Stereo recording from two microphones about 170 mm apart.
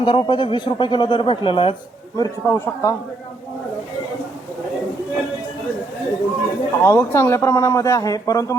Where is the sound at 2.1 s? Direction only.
20° left (ahead or behind).